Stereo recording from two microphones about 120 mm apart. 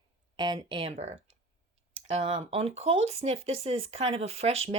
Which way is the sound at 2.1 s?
50° right (ahead or behind).